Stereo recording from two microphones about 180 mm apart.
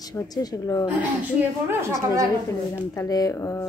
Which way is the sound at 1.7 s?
15° right (ahead or behind).